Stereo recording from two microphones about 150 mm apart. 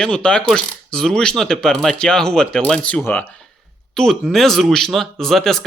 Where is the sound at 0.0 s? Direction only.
5° left (ahead or behind).